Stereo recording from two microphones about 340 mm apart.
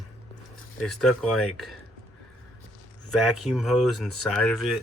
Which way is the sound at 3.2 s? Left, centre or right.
Centre.